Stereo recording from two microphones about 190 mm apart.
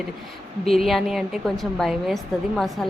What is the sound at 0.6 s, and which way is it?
A woman's voice, centre (ahead or behind).